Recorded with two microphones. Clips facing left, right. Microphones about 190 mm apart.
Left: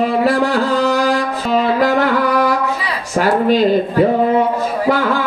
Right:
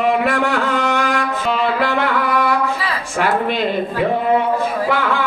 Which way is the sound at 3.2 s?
40° left (ahead or behind).